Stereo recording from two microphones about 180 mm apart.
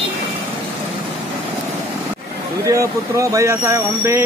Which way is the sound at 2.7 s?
15° right (ahead or behind).